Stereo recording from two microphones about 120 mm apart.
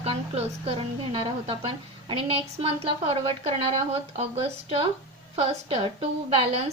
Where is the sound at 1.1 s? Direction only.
45° right (ahead or behind).